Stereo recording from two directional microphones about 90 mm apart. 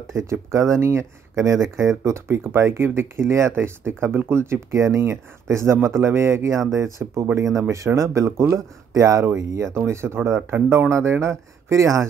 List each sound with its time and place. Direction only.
0.0 s speech: 35° right (ahead or behind)
10.9 s speech: 30° right (ahead or behind)